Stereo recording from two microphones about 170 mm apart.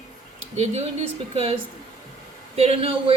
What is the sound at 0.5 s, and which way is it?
Speech, 40° right (ahead or behind).